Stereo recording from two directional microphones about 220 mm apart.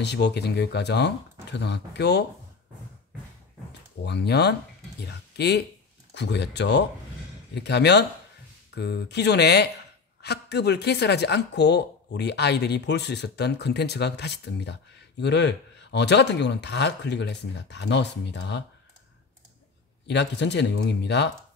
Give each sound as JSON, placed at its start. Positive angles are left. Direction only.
{"t": 0.0, "sound": "speech", "side_deg": 50}
{"t": 4.0, "sound": "speech", "side_deg": 50}
{"t": 20.1, "sound": "speech", "side_deg": 50}